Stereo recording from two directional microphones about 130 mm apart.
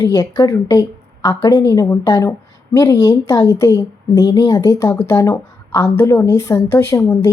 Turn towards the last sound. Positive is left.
turn(degrees=25)  # may be behind; listen again after turning